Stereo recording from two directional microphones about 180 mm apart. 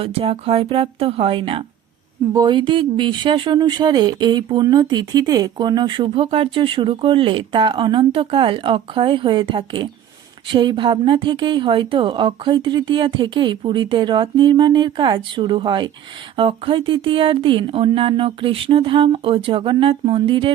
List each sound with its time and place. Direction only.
0.0 s speech: 30° right (ahead or behind)